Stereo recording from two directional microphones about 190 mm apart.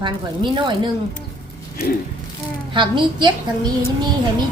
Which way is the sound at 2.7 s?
25° right (ahead or behind).